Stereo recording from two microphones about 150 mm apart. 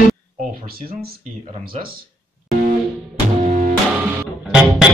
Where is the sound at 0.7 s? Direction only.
90° right.